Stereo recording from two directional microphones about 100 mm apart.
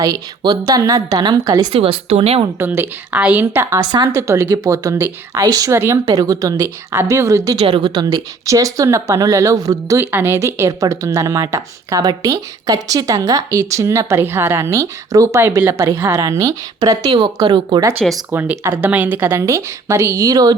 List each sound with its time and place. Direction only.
0.0 s a woman's voice: 40° right (ahead or behind)
1.7 s speech: 75° right (ahead or behind)
2.6 s a woman's voice: 20° right (ahead or behind)
3.8 s a woman's voice: 40° right (ahead or behind)
4.1 s a woman's voice: 25° right (ahead or behind)
5.7 s a woman's voice: 25° right (ahead or behind)
6.1 s a woman's voice: 35° right (ahead or behind)
7.6 s a woman's voice: 60° right (ahead or behind)
8.4 s a woman's voice: 35° right (ahead or behind)
18.3 s a woman's voice: 20° right (ahead or behind); by 20.6 s 40° right (ahead or behind)